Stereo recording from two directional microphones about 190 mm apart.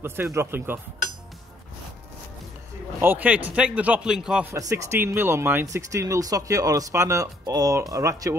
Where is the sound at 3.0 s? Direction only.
10° right (ahead or behind).